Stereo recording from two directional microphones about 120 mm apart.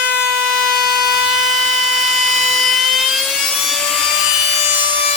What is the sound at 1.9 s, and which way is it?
Helicopter, centre (ahead or behind).